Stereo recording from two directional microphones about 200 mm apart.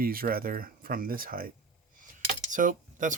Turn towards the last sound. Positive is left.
turn(degrees=-40)  # may be behind; listen again after turning